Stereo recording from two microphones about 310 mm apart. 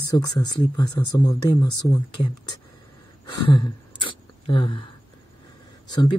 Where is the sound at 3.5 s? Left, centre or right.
Centre.